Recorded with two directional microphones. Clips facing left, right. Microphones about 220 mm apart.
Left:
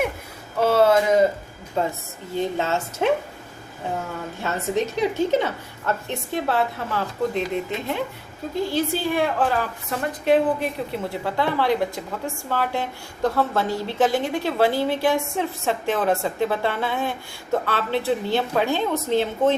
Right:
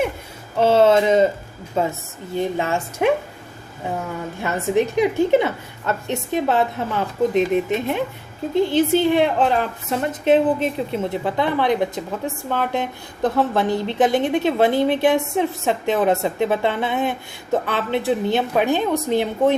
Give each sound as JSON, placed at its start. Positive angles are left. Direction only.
{"t": 0.6, "sound": "a woman's voice", "side_deg": -25}
{"t": 2.3, "sound": "a woman's voice", "side_deg": -15}
{"t": 4.4, "sound": "a woman's voice", "side_deg": -15}